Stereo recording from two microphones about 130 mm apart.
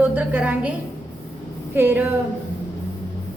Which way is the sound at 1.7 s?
15° right (ahead or behind).